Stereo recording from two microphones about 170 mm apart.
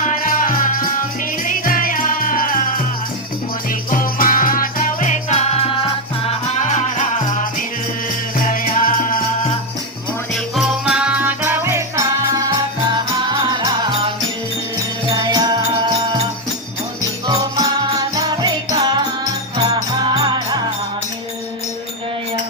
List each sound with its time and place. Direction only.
0.0 s music: 50° left (ahead or behind)
3.8 s music: 55° left (ahead or behind)
8.4 s music: 55° left (ahead or behind)
10.3 s music: centre (ahead or behind); by 14.1 s 25° right (ahead or behind)
15.1 s music: 25° right (ahead or behind)
17.2 s music: 20° right (ahead or behind)